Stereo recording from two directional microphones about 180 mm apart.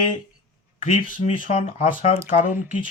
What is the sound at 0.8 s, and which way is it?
Speech, 45° left (ahead or behind).